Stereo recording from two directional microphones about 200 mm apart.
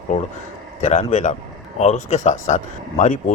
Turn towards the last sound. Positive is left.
turn(degrees=35)  # may be behind; listen again after turning